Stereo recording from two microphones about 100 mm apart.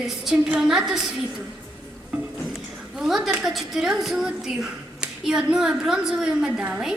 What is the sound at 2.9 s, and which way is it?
A woman's voice, 5° right (ahead or behind).